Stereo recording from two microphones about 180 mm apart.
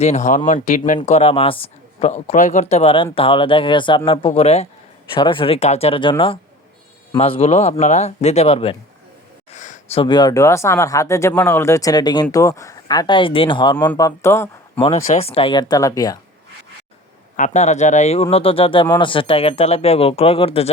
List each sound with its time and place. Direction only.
0.0 s speech: 40° left (ahead or behind)
9.5 s a sound: 45° left (ahead or behind)
10.0 s speech: 25° left (ahead or behind)
14.8 s speech: 30° left (ahead or behind)
17.3 s speech: 40° left (ahead or behind)